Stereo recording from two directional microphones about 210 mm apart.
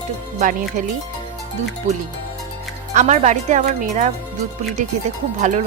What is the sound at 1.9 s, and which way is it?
Speech, 35° right (ahead or behind).